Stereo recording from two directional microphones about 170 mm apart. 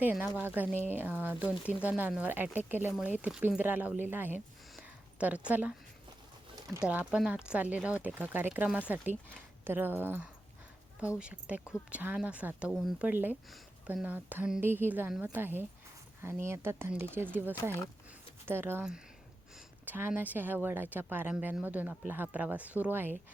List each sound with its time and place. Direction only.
0.0 s speech: 10° right (ahead or behind)
6.8 s speech: 5° right (ahead or behind)
17.6 s speech: 15° left (ahead or behind)
18.4 s speech: 10° right (ahead or behind)